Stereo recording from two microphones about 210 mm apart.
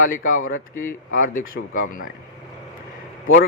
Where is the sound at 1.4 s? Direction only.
70° left (ahead or behind).